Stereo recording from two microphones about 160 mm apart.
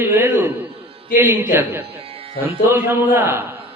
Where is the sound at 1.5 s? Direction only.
15° right (ahead or behind).